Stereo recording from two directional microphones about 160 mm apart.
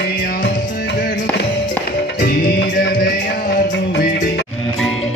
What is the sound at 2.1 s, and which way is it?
Music, 90° left.